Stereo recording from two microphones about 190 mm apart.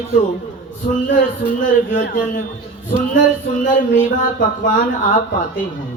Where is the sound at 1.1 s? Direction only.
45° left (ahead or behind).